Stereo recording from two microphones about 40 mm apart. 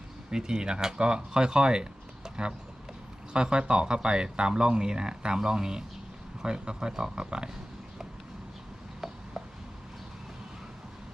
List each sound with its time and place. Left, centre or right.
0.3 s speech: centre